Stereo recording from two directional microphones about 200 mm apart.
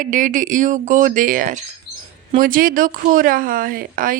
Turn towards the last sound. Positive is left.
turn(degrees=-45)  # may be behind; listen again after turning